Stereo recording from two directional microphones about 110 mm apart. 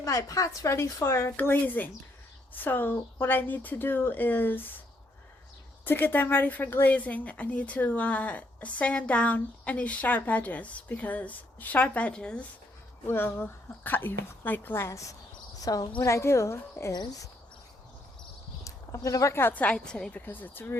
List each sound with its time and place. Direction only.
0.0 s a woman's voice: 30° left (ahead or behind)
5.8 s a woman's voice: 15° left (ahead or behind)
13.1 s speech: 20° left (ahead or behind)
16.9 s speech: 40° left (ahead or behind)
18.6 s a woman's voice: 30° left (ahead or behind)